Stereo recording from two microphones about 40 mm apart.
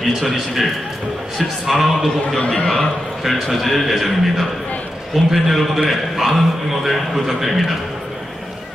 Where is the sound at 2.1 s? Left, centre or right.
Left.